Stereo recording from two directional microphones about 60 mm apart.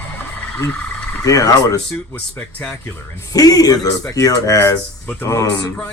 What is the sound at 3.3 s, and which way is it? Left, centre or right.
Speech, left.